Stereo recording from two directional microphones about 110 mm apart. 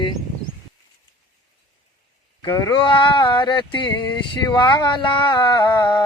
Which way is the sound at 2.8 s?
50° left (ahead or behind).